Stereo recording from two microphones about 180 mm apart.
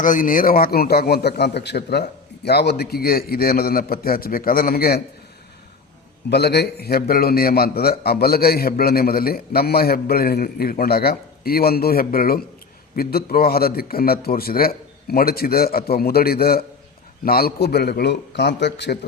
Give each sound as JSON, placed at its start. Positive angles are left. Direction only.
{"t": 0.0, "sound": "a man's voice", "side_deg": 45}
{"t": 6.3, "sound": "a man's voice", "side_deg": 65}